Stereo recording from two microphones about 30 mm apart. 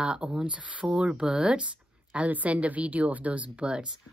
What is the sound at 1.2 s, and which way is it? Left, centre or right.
Speech, right.